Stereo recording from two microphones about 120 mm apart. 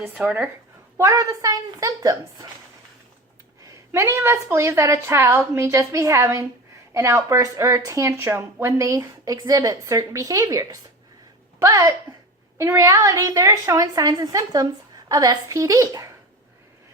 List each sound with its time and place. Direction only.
0.1 s speech: 10° right (ahead or behind)
0.9 s speech: 25° right (ahead or behind)
3.9 s speech: 25° right (ahead or behind)